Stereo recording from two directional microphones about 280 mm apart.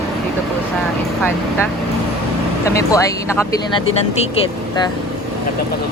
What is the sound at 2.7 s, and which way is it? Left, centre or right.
Speech, centre.